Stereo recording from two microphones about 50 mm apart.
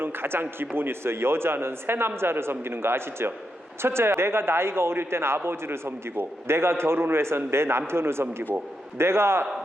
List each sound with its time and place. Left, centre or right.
0.0 s a man's voice: right